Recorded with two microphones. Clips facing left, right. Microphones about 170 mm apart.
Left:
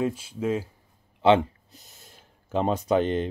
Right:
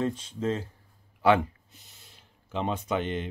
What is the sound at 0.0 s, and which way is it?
Speech, 10° left (ahead or behind).